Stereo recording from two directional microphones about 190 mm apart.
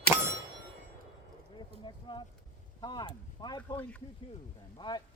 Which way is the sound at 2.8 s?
25° left (ahead or behind).